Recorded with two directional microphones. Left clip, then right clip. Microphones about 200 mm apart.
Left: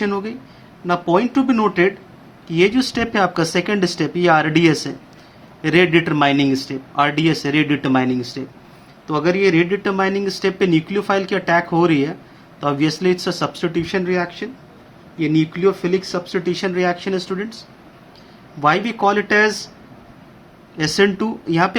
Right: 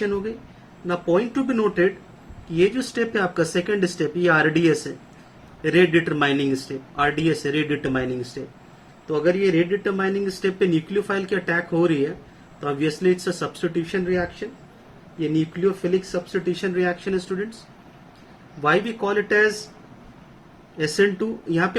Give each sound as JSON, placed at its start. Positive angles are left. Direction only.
{"t": 0.0, "sound": "speech", "side_deg": 50}
{"t": 18.6, "sound": "speech", "side_deg": 50}
{"t": 20.7, "sound": "speech", "side_deg": 50}